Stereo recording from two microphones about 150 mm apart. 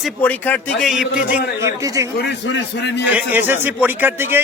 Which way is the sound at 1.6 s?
20° right (ahead or behind).